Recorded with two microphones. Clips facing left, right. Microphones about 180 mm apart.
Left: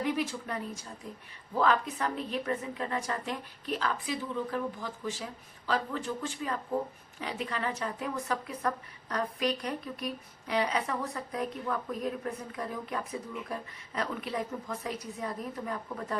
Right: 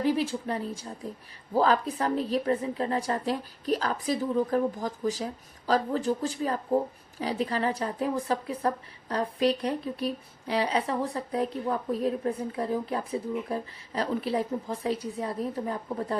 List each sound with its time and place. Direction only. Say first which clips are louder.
0.0 s a woman's voice: right 5 dB; 30° right (ahead or behind)